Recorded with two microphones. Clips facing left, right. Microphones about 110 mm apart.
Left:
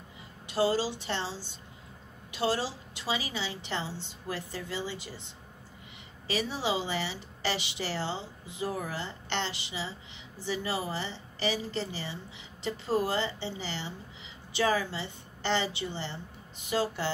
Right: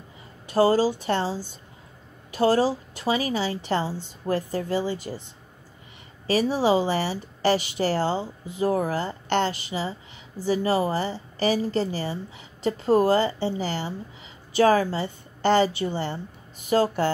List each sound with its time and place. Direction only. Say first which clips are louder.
0.5 s a woman's voice: right 8 dB; 45° right (ahead or behind)
6.2 s a woman's voice: right 10 dB; 45° right (ahead or behind)